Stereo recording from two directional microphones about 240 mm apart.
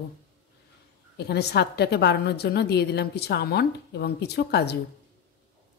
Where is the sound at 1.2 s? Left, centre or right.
Left.